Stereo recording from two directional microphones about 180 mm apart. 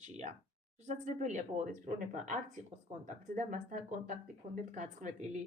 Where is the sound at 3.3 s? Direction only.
45° right (ahead or behind).